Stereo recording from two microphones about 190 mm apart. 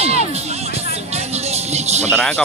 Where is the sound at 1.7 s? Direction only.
35° right (ahead or behind).